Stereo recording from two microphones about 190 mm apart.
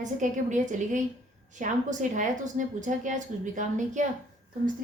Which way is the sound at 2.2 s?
40° right (ahead or behind).